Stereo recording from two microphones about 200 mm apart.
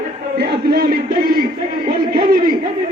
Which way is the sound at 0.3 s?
50° right (ahead or behind).